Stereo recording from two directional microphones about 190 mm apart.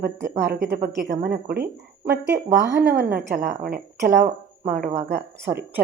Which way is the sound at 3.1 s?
50° right (ahead or behind).